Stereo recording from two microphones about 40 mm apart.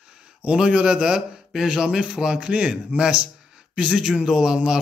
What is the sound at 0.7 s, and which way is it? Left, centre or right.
A man's voice, right.